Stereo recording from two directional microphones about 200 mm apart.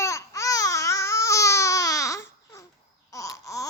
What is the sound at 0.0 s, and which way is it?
Babbling, 15° left (ahead or behind).